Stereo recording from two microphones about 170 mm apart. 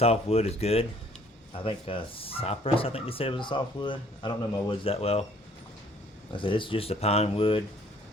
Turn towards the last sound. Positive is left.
turn(degrees=30)  # may be behind; listen again after turning